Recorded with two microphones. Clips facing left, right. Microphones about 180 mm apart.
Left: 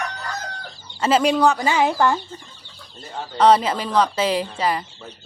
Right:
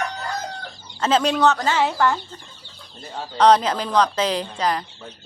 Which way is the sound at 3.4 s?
5° left (ahead or behind).